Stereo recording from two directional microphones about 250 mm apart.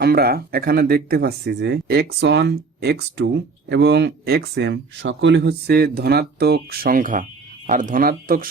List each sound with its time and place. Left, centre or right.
0.0 s speech: right